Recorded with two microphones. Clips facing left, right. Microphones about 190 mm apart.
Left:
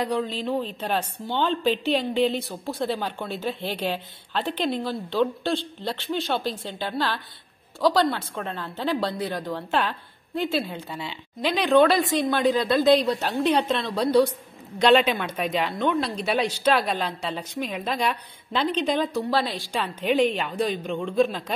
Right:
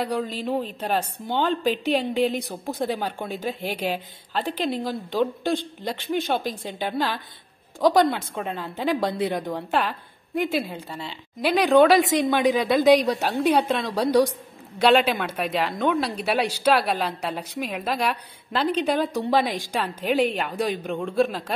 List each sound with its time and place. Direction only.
0.0 s a woman's voice: 5° right (ahead or behind)
10.9 s a woman's voice: centre (ahead or behind)
11.4 s a woman's voice: 10° right (ahead or behind)